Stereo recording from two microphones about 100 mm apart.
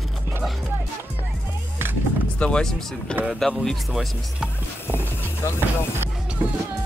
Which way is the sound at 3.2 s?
5° right (ahead or behind).